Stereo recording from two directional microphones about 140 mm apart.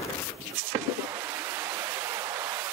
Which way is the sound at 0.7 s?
20° right (ahead or behind).